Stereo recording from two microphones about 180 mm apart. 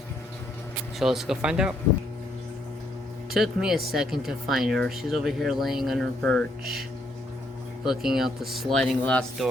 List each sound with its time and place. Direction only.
0.9 s speech: centre (ahead or behind)
3.3 s speech: 5° right (ahead or behind)
7.9 s speech: centre (ahead or behind)